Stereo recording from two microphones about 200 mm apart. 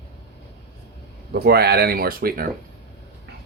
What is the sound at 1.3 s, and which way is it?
Speech, 50° right (ahead or behind).